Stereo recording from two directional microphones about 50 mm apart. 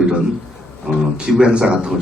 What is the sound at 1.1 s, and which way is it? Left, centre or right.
Speech, centre.